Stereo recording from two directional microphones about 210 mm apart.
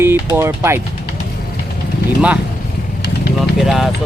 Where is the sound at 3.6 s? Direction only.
Centre (ahead or behind).